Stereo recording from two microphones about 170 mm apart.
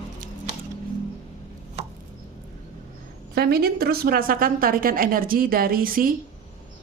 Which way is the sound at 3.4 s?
65° right (ahead or behind).